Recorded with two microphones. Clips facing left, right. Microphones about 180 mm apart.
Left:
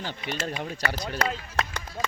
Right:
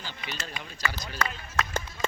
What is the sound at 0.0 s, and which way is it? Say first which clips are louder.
Speech: left 7 dB; 55° left (ahead or behind).